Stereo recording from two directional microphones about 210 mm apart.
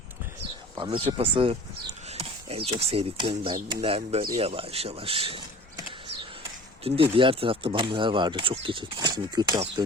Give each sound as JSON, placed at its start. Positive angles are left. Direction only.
{"t": 0.8, "sound": "speech", "side_deg": -25}
{"t": 6.8, "sound": "speech", "side_deg": -25}